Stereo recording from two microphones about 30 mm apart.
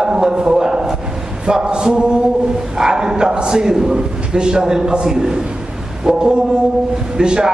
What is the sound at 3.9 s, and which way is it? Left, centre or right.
A man's voice, right.